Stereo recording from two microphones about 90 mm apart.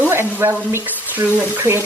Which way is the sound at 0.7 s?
20° right (ahead or behind).